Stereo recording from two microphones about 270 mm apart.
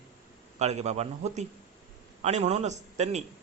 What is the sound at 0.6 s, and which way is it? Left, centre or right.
A man's voice, right.